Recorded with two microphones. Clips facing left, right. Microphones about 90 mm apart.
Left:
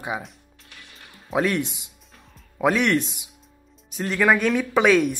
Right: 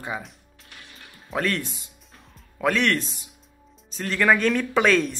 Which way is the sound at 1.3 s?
15° left (ahead or behind).